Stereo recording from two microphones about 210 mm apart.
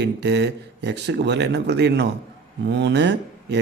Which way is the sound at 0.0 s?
55° right (ahead or behind).